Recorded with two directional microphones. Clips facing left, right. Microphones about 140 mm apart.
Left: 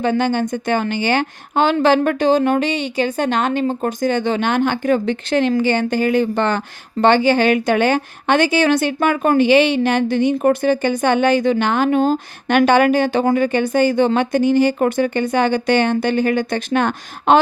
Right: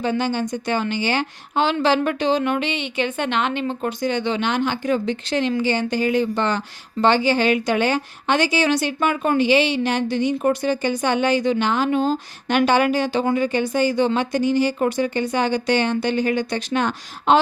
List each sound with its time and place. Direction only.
0.0 s a woman's voice: 55° left (ahead or behind)